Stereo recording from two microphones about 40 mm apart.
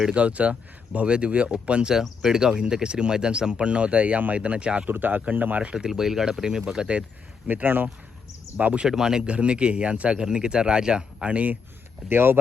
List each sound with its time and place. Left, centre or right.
0.1 s speech: right
4.9 s speech: right
5.7 s speech: centre
7.4 s speech: right
8.5 s speech: right
8.8 s speech: centre
9.2 s speech: right
12.0 s speech: right